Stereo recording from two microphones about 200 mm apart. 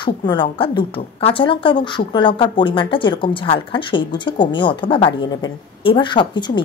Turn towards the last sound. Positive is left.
turn(degrees=25)  # may be behind; listen again after turning